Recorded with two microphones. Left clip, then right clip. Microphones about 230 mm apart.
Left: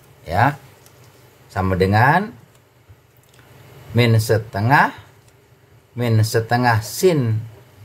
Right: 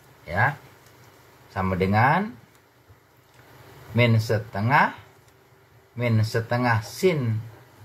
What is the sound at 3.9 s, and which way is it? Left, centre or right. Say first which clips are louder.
Speech: left 5 dB; left.